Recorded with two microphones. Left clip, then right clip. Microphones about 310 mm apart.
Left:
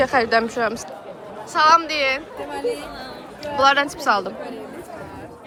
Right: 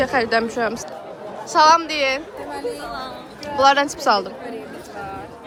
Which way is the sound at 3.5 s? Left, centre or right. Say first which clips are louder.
Right 1 dB; centre.